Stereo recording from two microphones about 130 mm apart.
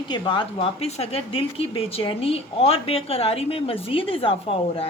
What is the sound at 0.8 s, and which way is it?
A woman's voice, 55° left (ahead or behind).